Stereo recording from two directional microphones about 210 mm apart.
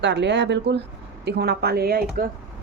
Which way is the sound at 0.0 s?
55° right (ahead or behind).